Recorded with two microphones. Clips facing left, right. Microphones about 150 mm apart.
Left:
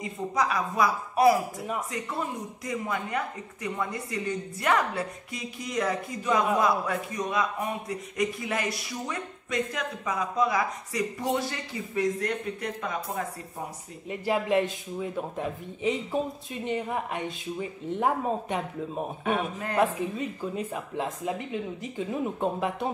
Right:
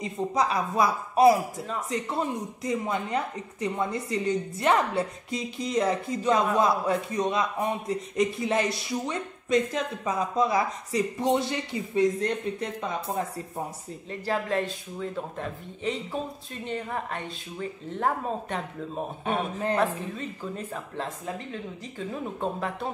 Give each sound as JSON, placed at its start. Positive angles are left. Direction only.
{"t": 0.0, "sound": "a woman's voice", "side_deg": -25}
{"t": 14.2, "sound": "a woman's voice", "side_deg": 15}
{"t": 19.7, "sound": "a woman's voice", "side_deg": 10}